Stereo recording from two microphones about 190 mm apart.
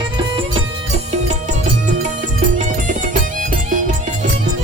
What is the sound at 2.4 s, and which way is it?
Music, 45° right (ahead or behind).